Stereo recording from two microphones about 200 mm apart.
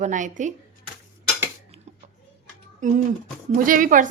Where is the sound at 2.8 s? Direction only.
40° right (ahead or behind).